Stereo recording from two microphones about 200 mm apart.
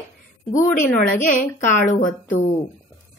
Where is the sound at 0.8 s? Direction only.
40° left (ahead or behind).